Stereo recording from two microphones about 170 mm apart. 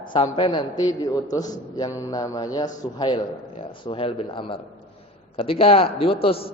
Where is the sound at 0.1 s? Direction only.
30° left (ahead or behind).